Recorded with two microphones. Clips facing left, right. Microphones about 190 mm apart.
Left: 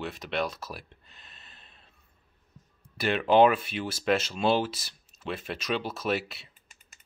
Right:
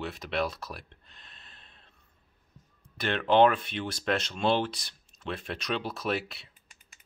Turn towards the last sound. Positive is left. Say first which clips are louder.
# left 1 dB
turn(degrees=0)  # may be behind; listen again after turning